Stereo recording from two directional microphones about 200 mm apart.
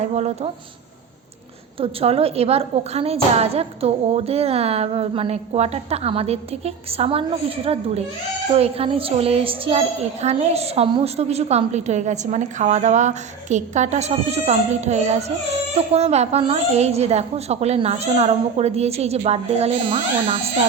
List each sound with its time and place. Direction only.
0.0 s a woman's voice: 35° right (ahead or behind)
1.8 s a woman's voice: 30° right (ahead or behind)